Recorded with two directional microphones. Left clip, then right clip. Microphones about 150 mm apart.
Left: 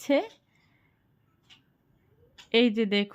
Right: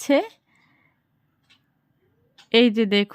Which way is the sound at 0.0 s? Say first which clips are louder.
Right 5 dB; 35° right (ahead or behind).